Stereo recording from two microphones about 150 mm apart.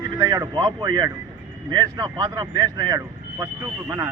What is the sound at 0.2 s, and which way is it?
Speech, 25° right (ahead or behind).